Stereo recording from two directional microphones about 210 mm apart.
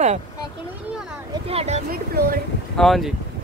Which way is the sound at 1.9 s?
45° right (ahead or behind).